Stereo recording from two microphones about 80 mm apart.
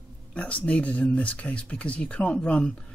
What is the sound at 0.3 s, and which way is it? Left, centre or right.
Speech, centre.